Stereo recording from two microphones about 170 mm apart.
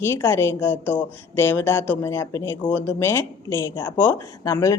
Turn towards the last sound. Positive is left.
turn(degrees=20)  # may be behind; listen again after turning